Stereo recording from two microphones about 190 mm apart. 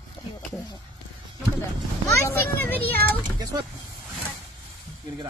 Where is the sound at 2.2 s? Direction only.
10° left (ahead or behind).